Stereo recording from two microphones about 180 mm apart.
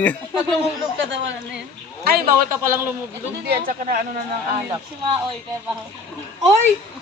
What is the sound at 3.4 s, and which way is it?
Speech, 55° right (ahead or behind).